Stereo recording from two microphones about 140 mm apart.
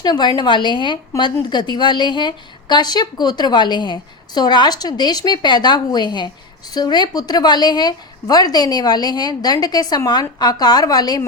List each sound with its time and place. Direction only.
0.0 s a woman's voice: 30° left (ahead or behind)